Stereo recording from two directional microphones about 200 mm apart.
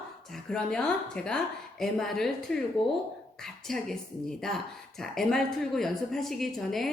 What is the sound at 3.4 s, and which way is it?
A woman's voice, centre (ahead or behind).